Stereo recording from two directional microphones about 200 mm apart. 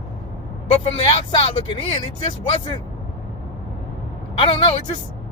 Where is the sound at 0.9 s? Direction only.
25° left (ahead or behind).